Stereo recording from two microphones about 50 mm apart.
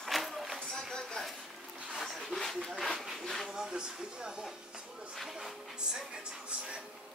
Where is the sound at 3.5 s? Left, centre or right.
Centre.